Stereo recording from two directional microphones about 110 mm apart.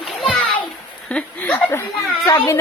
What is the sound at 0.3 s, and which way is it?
Children playing, 10° left (ahead or behind).